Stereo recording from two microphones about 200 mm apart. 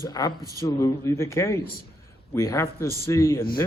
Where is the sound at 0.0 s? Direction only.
20° left (ahead or behind).